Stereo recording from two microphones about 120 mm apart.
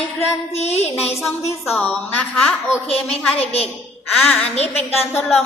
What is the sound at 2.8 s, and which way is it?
Speech, 55° left (ahead or behind).